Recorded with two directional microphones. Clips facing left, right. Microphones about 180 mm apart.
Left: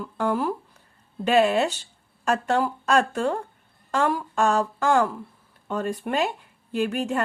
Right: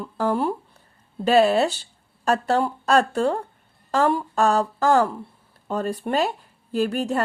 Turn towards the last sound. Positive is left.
turn(degrees=-35)  # may be behind; listen again after turning